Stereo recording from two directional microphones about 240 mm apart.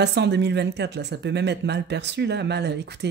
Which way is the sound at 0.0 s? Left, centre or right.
Right.